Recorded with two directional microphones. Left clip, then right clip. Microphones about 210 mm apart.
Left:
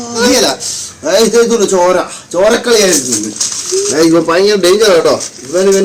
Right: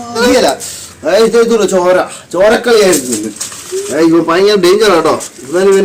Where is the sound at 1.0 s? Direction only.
5° right (ahead or behind).